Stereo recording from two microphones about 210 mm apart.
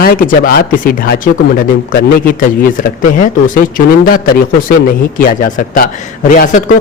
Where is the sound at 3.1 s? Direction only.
40° left (ahead or behind).